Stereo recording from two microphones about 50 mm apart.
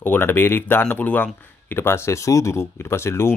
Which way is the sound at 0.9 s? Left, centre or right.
Left.